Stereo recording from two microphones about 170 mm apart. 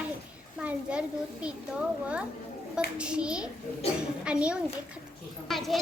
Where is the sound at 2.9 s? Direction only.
5° right (ahead or behind).